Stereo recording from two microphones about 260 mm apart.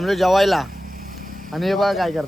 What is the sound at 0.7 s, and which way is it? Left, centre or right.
Vehicle, right.